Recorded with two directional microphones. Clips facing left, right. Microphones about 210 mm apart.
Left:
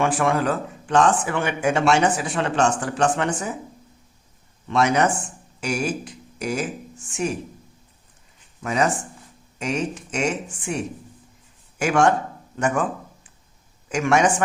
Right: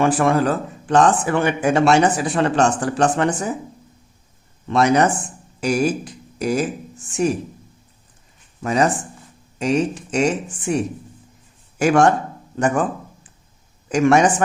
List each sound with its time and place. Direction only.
0.0 s speech: 40° right (ahead or behind)
4.7 s speech: 35° right (ahead or behind)
8.6 s speech: 35° right (ahead or behind)
11.8 s speech: 40° right (ahead or behind)
13.9 s speech: 35° right (ahead or behind)